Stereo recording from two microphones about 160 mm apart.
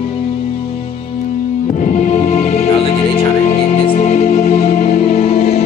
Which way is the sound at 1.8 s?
50° left (ahead or behind).